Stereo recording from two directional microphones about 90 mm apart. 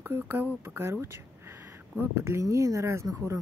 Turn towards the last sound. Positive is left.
turn(degrees=-35)  # may be behind; listen again after turning